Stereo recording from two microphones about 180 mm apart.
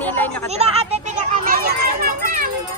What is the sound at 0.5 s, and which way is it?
A child's voice, 35° right (ahead or behind).